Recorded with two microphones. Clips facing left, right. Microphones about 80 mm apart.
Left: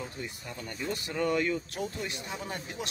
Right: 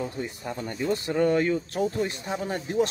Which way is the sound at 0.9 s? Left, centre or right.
Right.